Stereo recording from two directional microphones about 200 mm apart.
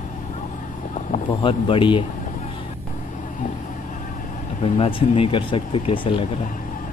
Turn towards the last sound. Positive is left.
turn(degrees=25)  # may be behind; listen again after turning